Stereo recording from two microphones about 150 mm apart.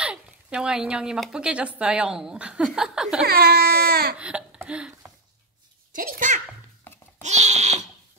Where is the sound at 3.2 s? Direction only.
90° right.